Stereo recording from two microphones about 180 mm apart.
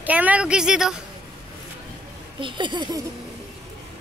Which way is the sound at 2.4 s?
25° right (ahead or behind).